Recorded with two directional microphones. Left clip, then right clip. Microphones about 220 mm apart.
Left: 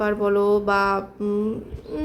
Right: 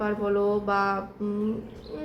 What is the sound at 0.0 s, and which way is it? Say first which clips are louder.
A woman's voice: left 5 dB; 55° left (ahead or behind).